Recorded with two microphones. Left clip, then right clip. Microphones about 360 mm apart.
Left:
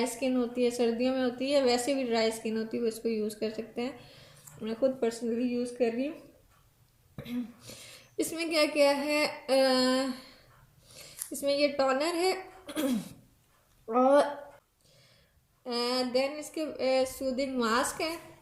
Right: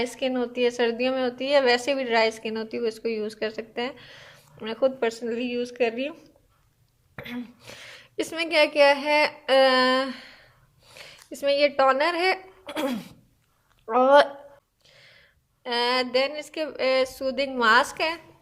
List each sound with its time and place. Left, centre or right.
0.0 s a woman's voice: right
7.2 s a woman's voice: centre
10.8 s a sound: centre
11.3 s a woman's voice: centre
15.6 s a woman's voice: right